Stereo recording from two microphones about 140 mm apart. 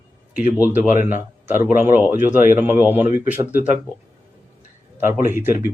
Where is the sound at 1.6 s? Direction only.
15° right (ahead or behind).